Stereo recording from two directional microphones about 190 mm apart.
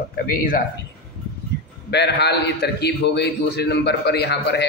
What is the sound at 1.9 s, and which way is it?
A man's voice, 60° left (ahead or behind).